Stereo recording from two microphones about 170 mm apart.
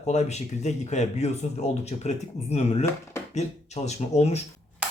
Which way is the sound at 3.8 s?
40° left (ahead or behind).